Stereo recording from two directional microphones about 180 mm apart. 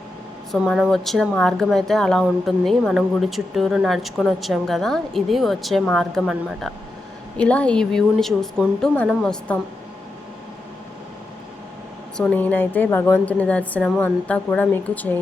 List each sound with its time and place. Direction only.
0.5 s speech: centre (ahead or behind)
12.1 s a woman's voice: 5° left (ahead or behind)